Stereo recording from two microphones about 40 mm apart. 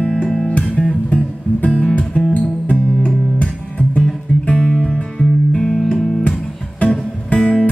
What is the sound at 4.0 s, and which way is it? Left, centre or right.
Music, left.